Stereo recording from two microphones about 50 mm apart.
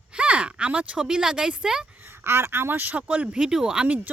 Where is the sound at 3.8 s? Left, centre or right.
Right.